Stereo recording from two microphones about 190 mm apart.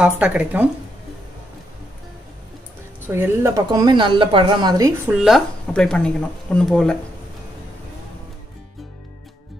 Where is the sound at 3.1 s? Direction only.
15° right (ahead or behind).